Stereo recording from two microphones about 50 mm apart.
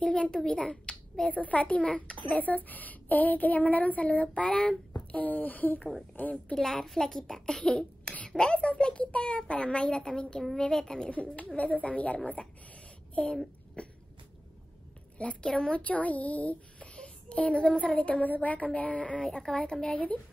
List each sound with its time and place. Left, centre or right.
0.0 s a child's voice: centre
1.3 s a child's voice: left
4.5 s a child's voice: centre
4.9 s a child's voice: left
6.5 s a child's voice: centre
11.5 s a child's voice: left
13.8 s cough: left
15.4 s speech: centre